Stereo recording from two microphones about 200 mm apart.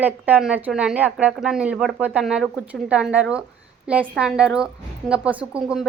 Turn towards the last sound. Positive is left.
turn(degrees=-5)  # may be behind; listen again after turning